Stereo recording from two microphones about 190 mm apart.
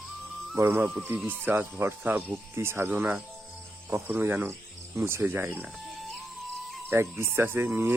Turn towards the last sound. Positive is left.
turn(degrees=-10)  # may be behind; listen again after turning